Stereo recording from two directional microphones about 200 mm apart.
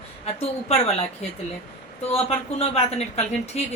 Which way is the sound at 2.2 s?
30° left (ahead or behind).